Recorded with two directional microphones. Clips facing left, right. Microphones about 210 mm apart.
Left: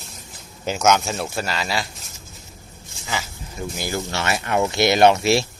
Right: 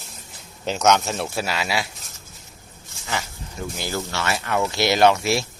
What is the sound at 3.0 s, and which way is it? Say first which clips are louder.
Speech: even; 5° left (ahead or behind).